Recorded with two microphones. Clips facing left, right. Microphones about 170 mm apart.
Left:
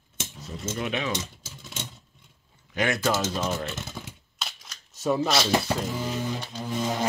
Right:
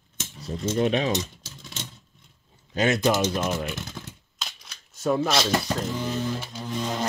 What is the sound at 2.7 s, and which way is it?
Speech, 25° right (ahead or behind).